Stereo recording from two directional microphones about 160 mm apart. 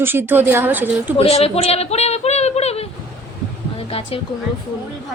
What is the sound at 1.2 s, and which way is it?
Speech, 40° left (ahead or behind).